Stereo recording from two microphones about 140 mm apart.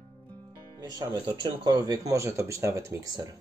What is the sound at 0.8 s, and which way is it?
Speech, 30° right (ahead or behind).